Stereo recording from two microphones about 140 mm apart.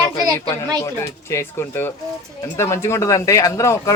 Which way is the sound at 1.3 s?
20° left (ahead or behind).